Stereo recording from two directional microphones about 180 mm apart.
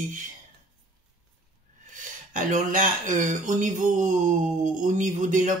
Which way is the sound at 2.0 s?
45° right (ahead or behind).